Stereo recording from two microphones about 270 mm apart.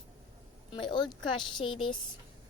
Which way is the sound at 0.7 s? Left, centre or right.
Centre.